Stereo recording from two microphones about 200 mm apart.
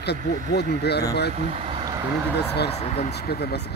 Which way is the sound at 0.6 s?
55° left (ahead or behind).